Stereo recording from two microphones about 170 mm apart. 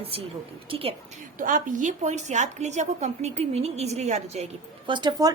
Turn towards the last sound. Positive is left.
turn(degrees=-25)  # may be behind; listen again after turning